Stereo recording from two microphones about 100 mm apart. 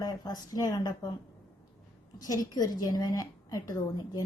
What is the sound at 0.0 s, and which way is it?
Speech, 40° left (ahead or behind).